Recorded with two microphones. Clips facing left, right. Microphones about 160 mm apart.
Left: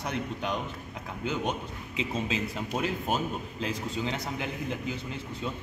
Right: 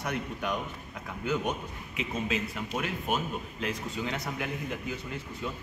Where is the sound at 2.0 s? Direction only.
30° left (ahead or behind).